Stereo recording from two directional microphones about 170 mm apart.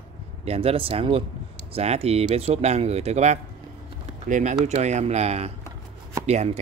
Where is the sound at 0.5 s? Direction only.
35° right (ahead or behind).